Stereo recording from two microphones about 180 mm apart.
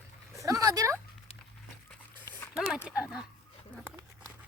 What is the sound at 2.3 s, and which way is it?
Dog, 10° left (ahead or behind).